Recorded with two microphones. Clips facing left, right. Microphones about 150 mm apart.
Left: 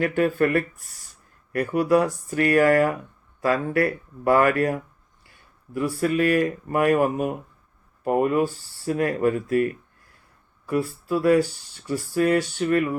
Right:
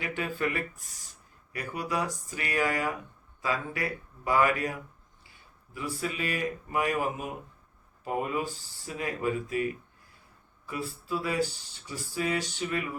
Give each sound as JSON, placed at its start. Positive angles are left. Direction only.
{"t": 0.0, "sound": "speech", "side_deg": 55}